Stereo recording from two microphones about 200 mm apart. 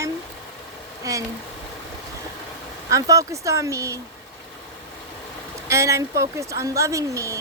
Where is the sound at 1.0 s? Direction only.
15° right (ahead or behind).